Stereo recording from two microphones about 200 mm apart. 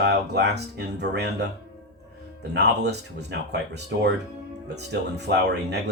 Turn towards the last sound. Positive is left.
turn(degrees=-55)  # may be behind; listen again after turning